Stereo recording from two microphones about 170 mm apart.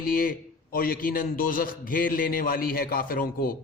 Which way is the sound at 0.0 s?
55° left (ahead or behind).